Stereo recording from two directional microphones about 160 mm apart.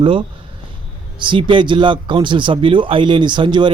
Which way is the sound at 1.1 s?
30° right (ahead or behind).